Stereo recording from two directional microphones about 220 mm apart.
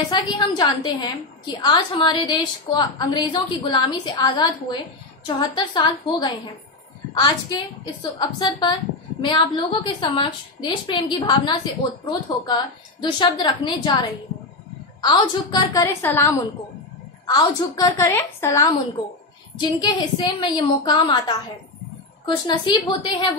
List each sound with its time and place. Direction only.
0.1 s a woman's voice: 20° left (ahead or behind)
15.0 s a woman's voice: 20° left (ahead or behind)